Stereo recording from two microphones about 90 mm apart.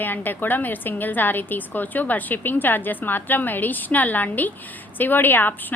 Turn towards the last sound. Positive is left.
turn(degrees=20)  # may be behind; listen again after turning